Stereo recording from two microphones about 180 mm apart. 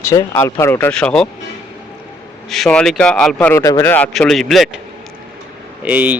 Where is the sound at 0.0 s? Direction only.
15° left (ahead or behind).